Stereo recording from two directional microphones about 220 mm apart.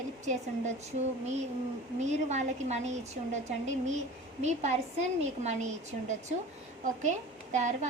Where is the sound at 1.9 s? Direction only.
30° right (ahead or behind).